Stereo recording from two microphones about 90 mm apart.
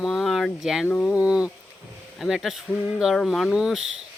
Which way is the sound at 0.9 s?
15° left (ahead or behind).